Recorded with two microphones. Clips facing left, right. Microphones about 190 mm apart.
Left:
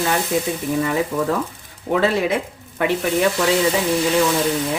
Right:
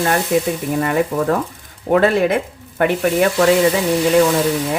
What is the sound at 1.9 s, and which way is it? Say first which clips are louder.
Speech: right 4 dB; 55° right (ahead or behind).